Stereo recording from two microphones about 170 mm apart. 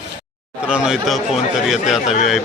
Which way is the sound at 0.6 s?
5° right (ahead or behind).